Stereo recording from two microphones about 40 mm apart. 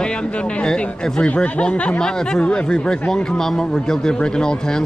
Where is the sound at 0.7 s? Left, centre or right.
Centre.